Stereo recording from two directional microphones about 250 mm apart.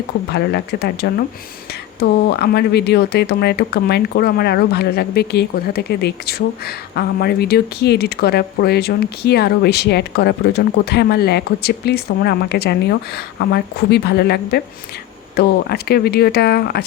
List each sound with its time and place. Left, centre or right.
0.3 s speech: left